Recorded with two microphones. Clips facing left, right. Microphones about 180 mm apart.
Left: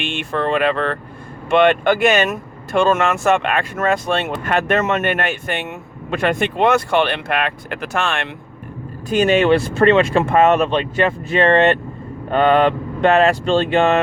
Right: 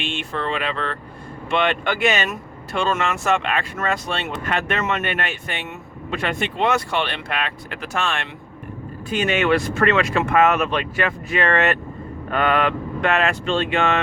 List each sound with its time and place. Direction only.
0.0 s speech: 55° left (ahead or behind)
9.0 s speech: 40° left (ahead or behind)